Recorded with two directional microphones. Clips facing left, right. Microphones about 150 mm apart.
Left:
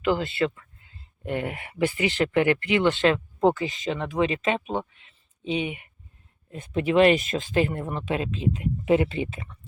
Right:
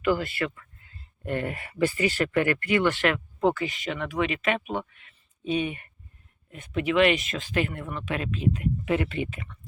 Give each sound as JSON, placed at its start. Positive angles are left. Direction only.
{"t": 0.0, "sound": "speech", "side_deg": 20}
{"t": 6.5, "sound": "speech", "side_deg": 30}